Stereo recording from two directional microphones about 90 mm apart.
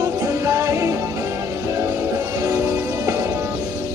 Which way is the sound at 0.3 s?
35° right (ahead or behind).